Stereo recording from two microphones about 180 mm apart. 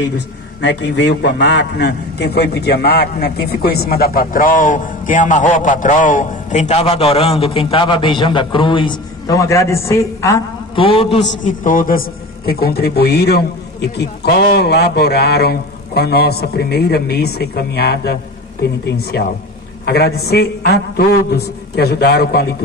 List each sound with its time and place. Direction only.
0.6 s a man's voice: 75° left (ahead or behind); by 10.4 s 15° left (ahead or behind)
10.8 s a man's voice: 30° left (ahead or behind)
11.4 s a man's voice: 50° left (ahead or behind)